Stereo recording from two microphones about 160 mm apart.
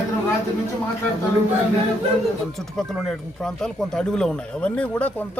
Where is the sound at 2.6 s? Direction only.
Centre (ahead or behind).